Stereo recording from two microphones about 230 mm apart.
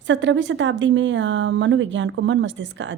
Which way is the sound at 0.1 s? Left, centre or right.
Right.